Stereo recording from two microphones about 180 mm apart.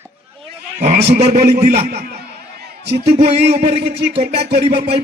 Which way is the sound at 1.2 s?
40° right (ahead or behind).